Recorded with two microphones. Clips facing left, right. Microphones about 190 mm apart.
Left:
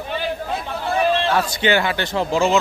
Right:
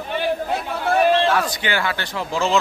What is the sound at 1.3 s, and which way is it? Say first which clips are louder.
A man's voice: left 3 dB; 25° left (ahead or behind).